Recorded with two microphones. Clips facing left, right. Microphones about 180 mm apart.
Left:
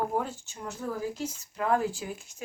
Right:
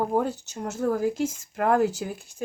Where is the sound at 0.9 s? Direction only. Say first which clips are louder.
Right 8 dB; 75° right (ahead or behind).